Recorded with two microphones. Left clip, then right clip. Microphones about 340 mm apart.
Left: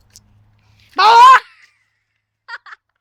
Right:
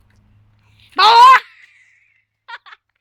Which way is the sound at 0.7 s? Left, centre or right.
Centre.